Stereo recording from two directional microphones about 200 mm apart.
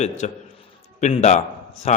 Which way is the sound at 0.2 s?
35° left (ahead or behind).